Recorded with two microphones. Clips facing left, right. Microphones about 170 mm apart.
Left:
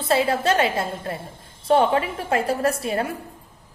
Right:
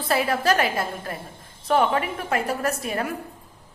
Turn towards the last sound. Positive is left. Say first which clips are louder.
# left 3 dB
turn(degrees=30)  # may be behind; listen again after turning